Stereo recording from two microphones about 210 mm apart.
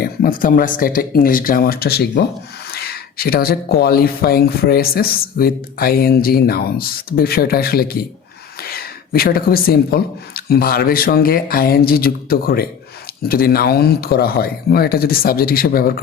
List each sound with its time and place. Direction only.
0.0 s speech: 45° left (ahead or behind)